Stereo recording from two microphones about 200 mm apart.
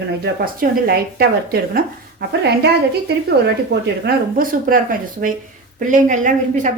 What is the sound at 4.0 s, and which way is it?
A woman's voice, 45° right (ahead or behind).